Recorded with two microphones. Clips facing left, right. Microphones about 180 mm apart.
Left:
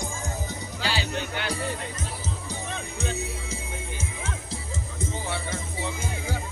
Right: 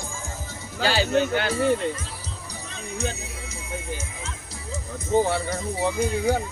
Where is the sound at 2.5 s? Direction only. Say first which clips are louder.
Left 1 dB; 30° left (ahead or behind).